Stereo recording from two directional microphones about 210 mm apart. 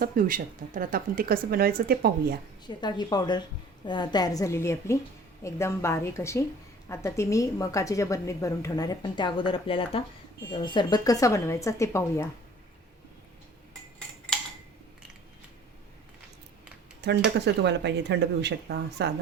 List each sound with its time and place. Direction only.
0.0 s speech: 40° right (ahead or behind)
2.6 s speech: 20° left (ahead or behind)
17.0 s speech: 55° right (ahead or behind)